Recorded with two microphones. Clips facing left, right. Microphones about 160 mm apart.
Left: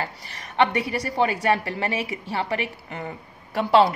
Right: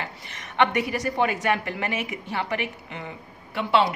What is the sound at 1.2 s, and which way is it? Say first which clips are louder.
Speech: left 3 dB; 35° left (ahead or behind).